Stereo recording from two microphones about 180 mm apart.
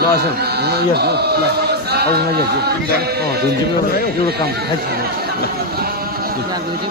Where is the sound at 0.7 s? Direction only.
65° right (ahead or behind).